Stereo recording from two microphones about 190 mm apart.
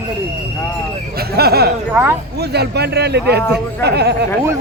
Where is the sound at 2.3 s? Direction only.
60° right (ahead or behind).